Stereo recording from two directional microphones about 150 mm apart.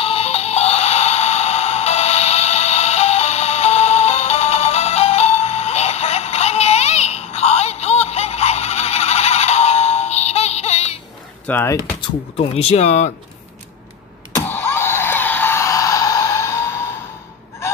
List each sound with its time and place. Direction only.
0.0 s music: 40° left (ahead or behind)
11.4 s speech: 10° left (ahead or behind)
12.4 s speech: 45° left (ahead or behind)
14.3 s a sound: 15° left (ahead or behind)